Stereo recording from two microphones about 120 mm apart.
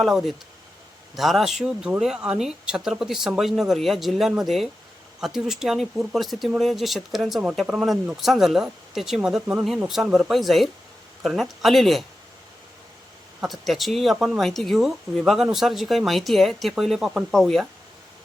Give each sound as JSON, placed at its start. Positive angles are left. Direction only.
{"t": 0.0, "sound": "speech", "side_deg": 0}
{"t": 13.4, "sound": "speech", "side_deg": 0}